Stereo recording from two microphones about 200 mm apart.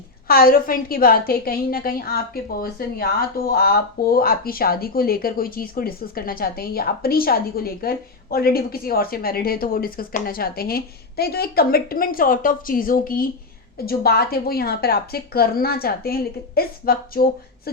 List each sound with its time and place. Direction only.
0.3 s a woman's voice: 45° left (ahead or behind)